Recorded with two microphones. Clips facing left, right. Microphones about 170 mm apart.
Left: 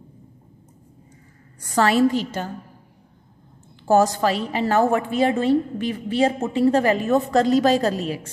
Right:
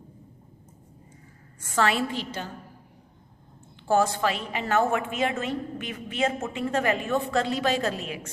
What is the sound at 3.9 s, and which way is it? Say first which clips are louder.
A woman's voice: left 6 dB; 40° left (ahead or behind).